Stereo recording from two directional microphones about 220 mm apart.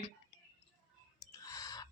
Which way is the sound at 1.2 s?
15° left (ahead or behind).